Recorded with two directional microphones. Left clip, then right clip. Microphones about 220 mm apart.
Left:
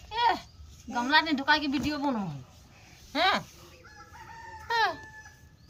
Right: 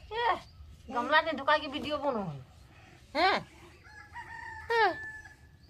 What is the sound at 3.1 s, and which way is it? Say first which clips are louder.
Speech: left 1 dB; 15° right (ahead or behind).